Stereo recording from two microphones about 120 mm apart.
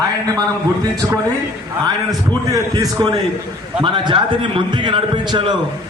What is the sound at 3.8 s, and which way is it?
A man's voice, 40° right (ahead or behind).